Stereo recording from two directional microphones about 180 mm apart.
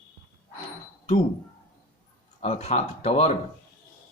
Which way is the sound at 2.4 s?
35° left (ahead or behind).